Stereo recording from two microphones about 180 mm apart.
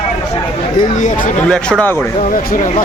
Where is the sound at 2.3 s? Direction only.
50° left (ahead or behind).